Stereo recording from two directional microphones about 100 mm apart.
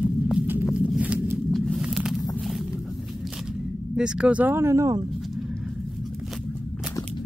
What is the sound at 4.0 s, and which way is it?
Speech, 10° right (ahead or behind).